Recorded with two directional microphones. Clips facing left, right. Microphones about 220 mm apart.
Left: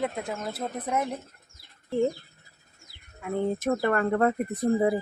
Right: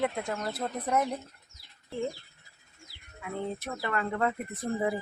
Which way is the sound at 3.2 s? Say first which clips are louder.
Left 8 dB; 45° left (ahead or behind).